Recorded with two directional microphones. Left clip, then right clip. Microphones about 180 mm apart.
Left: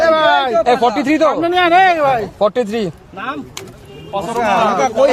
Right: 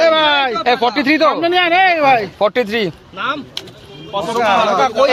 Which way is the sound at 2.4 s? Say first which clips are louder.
Even; 5° right (ahead or behind).